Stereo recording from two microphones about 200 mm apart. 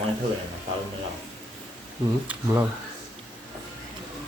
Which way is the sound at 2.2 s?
10° right (ahead or behind).